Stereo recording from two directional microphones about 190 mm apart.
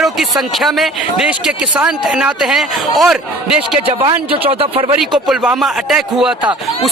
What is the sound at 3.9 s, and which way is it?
Speech, 30° right (ahead or behind).